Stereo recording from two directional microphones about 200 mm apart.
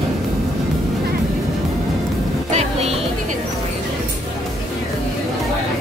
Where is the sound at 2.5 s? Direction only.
35° right (ahead or behind).